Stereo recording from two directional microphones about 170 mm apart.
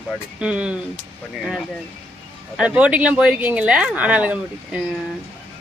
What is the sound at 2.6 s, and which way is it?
Speech, 5° right (ahead or behind).